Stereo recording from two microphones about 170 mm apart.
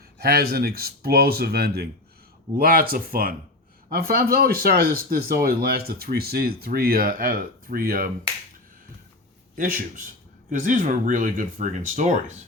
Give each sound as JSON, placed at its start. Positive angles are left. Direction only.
{"t": 0.2, "sound": "speech", "side_deg": -65}
{"t": 9.6, "sound": "speech", "side_deg": -55}